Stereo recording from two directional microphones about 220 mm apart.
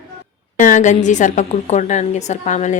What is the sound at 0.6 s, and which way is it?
A woman's voice, 35° left (ahead or behind).